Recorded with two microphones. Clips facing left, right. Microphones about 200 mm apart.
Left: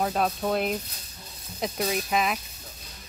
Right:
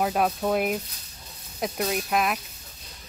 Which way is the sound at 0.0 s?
5° right (ahead or behind).